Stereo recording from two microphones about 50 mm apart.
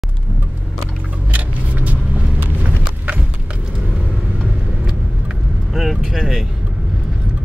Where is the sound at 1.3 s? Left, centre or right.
Right.